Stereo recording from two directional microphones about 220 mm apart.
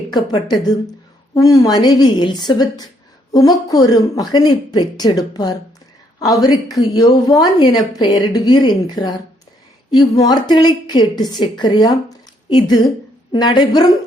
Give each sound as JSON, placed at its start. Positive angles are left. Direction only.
{"t": 0.1, "sound": "a woman's voice", "side_deg": 20}